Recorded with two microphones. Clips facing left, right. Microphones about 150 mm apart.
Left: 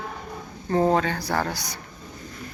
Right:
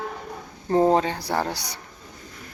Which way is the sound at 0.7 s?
25° right (ahead or behind).